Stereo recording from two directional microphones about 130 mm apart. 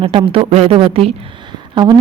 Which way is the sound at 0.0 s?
40° right (ahead or behind).